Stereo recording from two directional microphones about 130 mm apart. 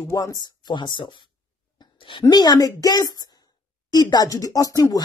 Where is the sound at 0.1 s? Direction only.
30° left (ahead or behind).